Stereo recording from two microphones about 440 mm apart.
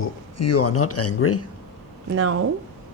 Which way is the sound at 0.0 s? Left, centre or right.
Left.